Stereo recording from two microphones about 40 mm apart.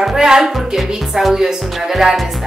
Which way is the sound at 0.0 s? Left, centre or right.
Centre.